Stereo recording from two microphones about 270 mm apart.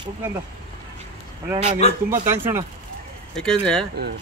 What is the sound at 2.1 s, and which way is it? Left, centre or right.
Speech, centre.